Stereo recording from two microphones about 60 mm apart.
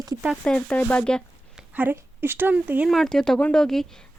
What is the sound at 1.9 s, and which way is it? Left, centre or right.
Speech, right.